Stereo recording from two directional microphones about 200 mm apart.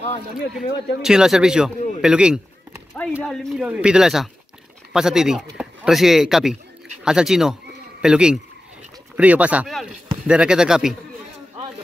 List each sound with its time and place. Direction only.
0.0 s speech: 35° left (ahead or behind)
0.6 s a man's voice: centre (ahead or behind)